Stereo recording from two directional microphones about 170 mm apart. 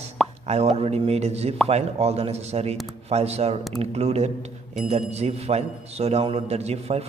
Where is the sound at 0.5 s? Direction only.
40° right (ahead or behind).